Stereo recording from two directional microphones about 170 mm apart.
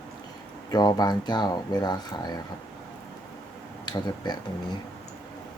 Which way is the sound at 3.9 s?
25° left (ahead or behind).